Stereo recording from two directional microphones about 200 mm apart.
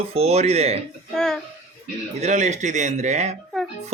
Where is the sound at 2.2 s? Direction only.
35° right (ahead or behind).